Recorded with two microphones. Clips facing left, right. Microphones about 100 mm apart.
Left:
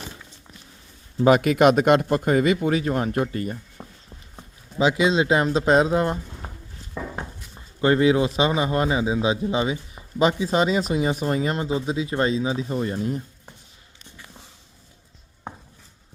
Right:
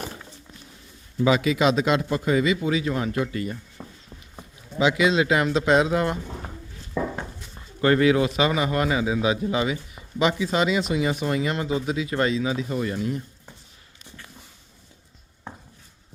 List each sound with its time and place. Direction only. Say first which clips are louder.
1.2 s speech: left 4 dB; 50° left (ahead or behind)
3.8 s a sound: right 1 dB; 15° left (ahead or behind)
4.8 s a man's voice: left 1 dB; 30° left (ahead or behind)
7.8 s a man's voice: left 1 dB; 25° left (ahead or behind)